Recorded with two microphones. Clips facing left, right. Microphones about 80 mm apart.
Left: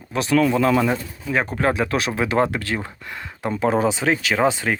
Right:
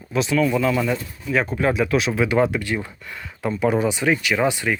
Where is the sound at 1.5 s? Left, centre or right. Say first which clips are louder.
Right 1 dB; left.